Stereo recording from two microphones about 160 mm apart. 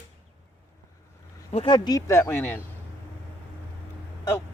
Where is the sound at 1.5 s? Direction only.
40° left (ahead or behind).